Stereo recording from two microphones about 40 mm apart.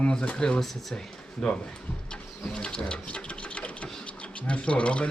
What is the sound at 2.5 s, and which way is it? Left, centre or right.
Sewing machine, left.